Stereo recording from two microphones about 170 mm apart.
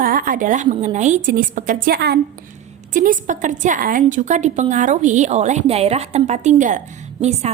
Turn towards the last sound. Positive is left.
turn(degrees=-40)  # may be behind; listen again after turning